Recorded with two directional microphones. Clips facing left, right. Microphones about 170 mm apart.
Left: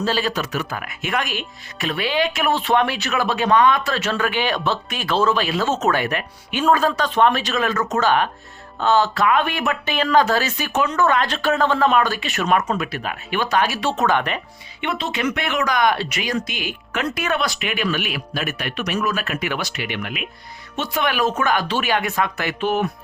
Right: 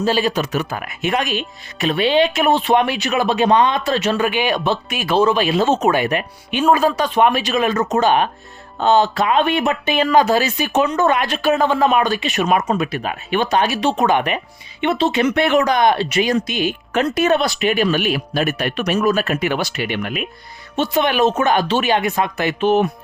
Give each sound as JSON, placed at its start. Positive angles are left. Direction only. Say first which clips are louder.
{"t": 0.0, "sound": "speech", "louder": "right 4 dB", "side_deg": -15}
{"t": 20.7, "sound": "speech", "louder": "right 5 dB", "side_deg": -25}